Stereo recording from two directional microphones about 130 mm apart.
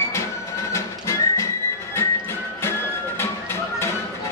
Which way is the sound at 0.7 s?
20° left (ahead or behind).